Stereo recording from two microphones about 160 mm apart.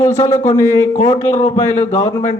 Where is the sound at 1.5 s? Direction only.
20° left (ahead or behind).